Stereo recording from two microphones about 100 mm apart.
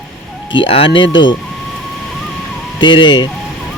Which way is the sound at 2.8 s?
50° left (ahead or behind).